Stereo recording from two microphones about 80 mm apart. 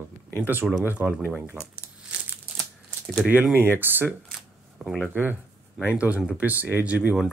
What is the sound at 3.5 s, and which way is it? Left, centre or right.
Speech, right.